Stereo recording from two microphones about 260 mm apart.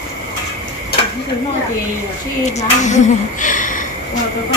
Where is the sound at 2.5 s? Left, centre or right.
Left.